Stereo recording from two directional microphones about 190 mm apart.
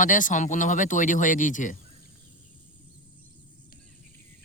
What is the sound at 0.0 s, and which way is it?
Speech, 45° left (ahead or behind).